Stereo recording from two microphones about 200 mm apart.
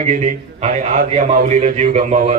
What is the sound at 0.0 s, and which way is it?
A man's voice, 35° right (ahead or behind).